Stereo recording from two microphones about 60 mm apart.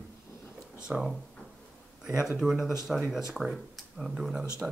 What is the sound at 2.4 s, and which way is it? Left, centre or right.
Speech, centre.